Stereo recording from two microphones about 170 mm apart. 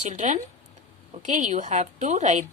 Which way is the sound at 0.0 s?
45° right (ahead or behind).